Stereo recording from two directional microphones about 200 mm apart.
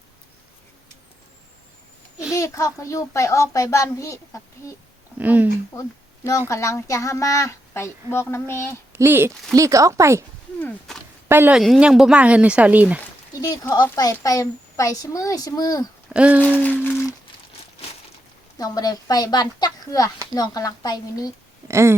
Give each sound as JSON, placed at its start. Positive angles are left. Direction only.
{"t": 2.3, "sound": "a woman's voice", "side_deg": 15}
{"t": 5.1, "sound": "speech", "side_deg": -10}
{"t": 6.5, "sound": "a woman's voice", "side_deg": 15}
{"t": 8.9, "sound": "speech", "side_deg": -10}
{"t": 10.6, "sound": "speech", "side_deg": 5}
{"t": 11.3, "sound": "speech", "side_deg": -10}
{"t": 13.4, "sound": "a woman's voice", "side_deg": 20}
{"t": 16.0, "sound": "a sound", "side_deg": -5}
{"t": 16.4, "sound": "a woman's voice", "side_deg": 5}
{"t": 18.5, "sound": "speech", "side_deg": 20}
{"t": 21.7, "sound": "speech", "side_deg": -15}